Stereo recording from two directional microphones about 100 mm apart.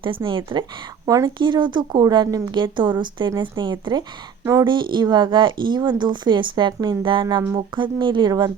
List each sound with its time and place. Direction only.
0.3 s speech: 55° right (ahead or behind)
1.0 s a woman's voice: 35° right (ahead or behind)
1.4 s speech: 50° right (ahead or behind)
8.3 s a woman's voice: 35° right (ahead or behind)